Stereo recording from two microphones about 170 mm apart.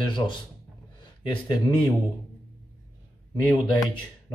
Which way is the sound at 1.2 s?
30° left (ahead or behind).